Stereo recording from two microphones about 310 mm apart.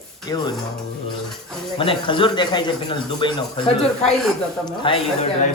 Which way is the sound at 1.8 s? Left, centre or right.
Centre.